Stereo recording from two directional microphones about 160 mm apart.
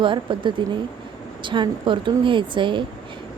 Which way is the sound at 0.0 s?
30° right (ahead or behind).